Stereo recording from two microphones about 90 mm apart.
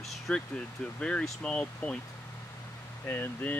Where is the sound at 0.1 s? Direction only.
10° left (ahead or behind).